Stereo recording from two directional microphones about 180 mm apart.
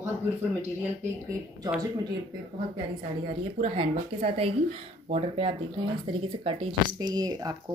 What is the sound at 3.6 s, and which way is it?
Speech, 30° right (ahead or behind).